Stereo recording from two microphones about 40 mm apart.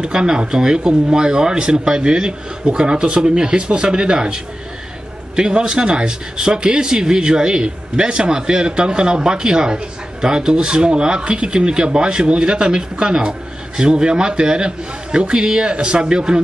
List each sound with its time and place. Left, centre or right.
0.0 s speech: right